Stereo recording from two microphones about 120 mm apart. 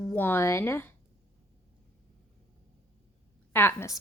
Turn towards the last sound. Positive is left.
turn(degrees=25)  # may be behind; listen again after turning